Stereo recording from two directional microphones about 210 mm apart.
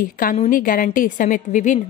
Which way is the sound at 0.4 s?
40° left (ahead or behind).